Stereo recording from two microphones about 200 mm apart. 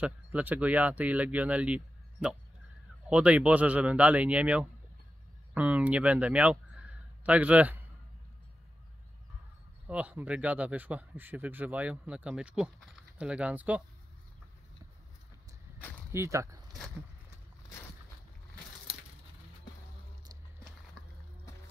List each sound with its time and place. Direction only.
0.0 s speech: 10° right (ahead or behind)
9.8 s speech: 5° right (ahead or behind)
16.1 s speech: 15° right (ahead or behind)